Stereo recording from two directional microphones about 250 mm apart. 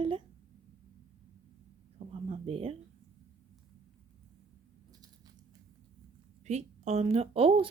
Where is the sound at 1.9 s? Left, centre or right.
Right.